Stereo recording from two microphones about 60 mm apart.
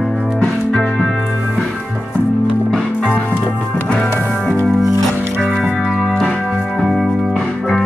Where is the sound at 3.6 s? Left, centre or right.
Centre.